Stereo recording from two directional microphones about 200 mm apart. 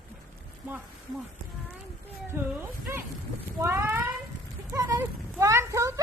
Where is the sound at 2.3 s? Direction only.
10° right (ahead or behind).